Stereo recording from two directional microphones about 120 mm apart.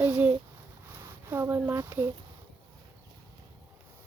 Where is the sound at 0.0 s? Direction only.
15° right (ahead or behind).